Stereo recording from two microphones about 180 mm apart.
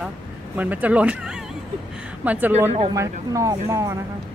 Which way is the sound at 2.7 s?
30° right (ahead or behind).